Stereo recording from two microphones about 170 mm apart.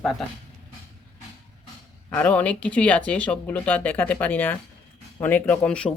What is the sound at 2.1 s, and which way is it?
Speech, 10° left (ahead or behind).